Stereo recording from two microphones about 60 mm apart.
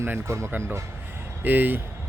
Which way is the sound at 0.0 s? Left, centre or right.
Right.